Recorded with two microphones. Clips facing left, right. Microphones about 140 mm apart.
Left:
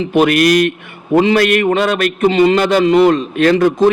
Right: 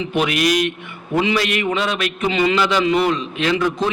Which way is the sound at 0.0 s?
50° left (ahead or behind).